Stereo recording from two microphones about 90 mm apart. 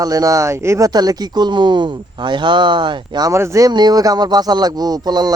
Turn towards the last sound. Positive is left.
turn(degrees=-50)  # may be behind; listen again after turning